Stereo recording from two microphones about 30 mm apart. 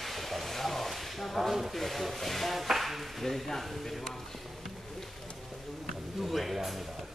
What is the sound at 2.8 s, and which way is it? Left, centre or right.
Chop, centre.